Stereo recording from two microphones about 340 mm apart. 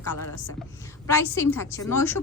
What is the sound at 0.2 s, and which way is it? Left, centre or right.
Speech, left.